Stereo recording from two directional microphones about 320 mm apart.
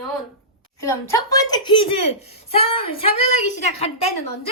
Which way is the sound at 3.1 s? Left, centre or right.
Left.